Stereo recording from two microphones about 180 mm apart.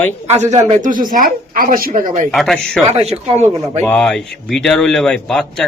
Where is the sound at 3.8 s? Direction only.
5° left (ahead or behind).